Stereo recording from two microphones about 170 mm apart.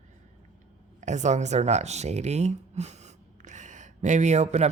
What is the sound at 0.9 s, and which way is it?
Speech, 45° right (ahead or behind).